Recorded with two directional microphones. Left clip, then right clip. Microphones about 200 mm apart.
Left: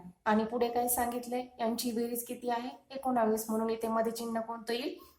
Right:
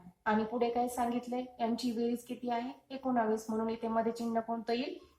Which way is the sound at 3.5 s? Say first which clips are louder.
Left 2 dB; 45° left (ahead or behind).